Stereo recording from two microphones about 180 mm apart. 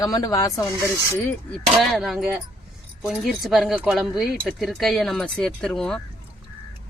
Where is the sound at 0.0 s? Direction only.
20° left (ahead or behind).